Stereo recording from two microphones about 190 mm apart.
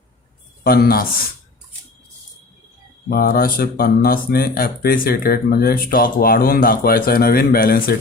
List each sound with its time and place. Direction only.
0.6 s speech: 55° left (ahead or behind)
3.1 s speech: 50° left (ahead or behind)